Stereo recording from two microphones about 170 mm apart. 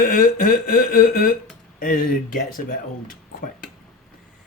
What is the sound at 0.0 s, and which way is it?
Speech, 55° left (ahead or behind).